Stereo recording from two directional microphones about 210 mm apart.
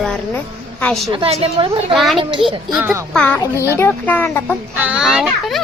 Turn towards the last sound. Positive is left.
turn(degrees=0)  # may be behind; listen again after turning